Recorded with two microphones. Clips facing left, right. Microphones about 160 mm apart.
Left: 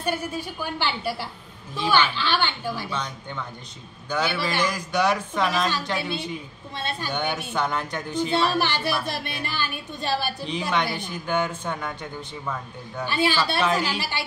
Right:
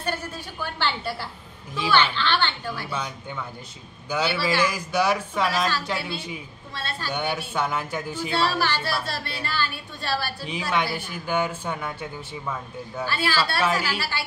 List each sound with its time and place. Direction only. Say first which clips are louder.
0.0 s a woman's voice: left 3 dB; 10° left (ahead or behind)
2.9 s a man's voice: even; 10° right (ahead or behind)
6.7 s speech: left 3 dB; 20° left (ahead or behind)
7.1 s a man's voice: right 2 dB; 5° right (ahead or behind)
8.3 s a woman's voice: even; 20° left (ahead or behind)
10.7 s a man's voice: right 1 dB; 5° right (ahead or behind)
13.0 s speech: left 3 dB; 20° left (ahead or behind)
13.6 s a man's voice: left 1 dB; 5° right (ahead or behind)
13.8 s speech: even; 20° left (ahead or behind)